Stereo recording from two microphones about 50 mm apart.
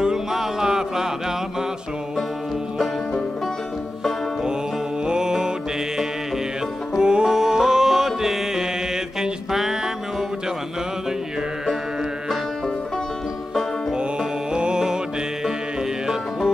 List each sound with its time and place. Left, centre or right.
0.0 s music: centre
5.0 s music: centre
7.0 s music: centre
14.5 s music: centre